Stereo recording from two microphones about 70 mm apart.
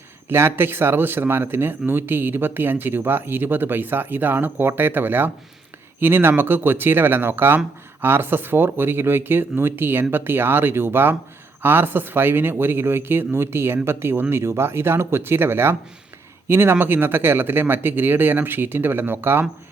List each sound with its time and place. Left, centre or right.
0.3 s speech: right